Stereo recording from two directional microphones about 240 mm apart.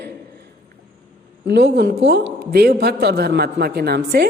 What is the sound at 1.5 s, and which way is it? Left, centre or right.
A man's voice, right.